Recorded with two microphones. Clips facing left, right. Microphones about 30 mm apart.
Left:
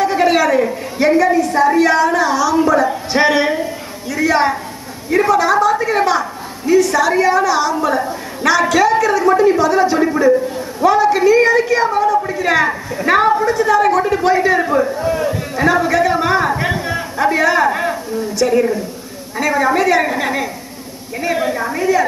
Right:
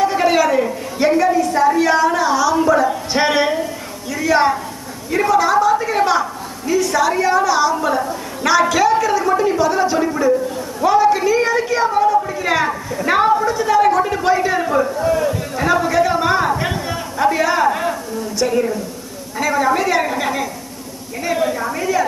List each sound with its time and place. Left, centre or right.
0.0 s a woman's voice: centre
12.2 s a sound: centre
12.4 s a woman's voice: centre